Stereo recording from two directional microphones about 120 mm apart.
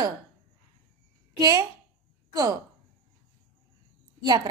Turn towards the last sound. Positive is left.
turn(degrees=-35)  # may be behind; listen again after turning